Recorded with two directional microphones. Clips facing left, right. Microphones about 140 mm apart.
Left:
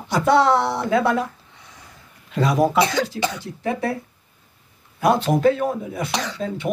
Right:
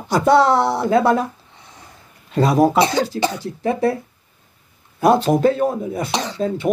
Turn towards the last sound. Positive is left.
turn(degrees=-30)  # may be behind; listen again after turning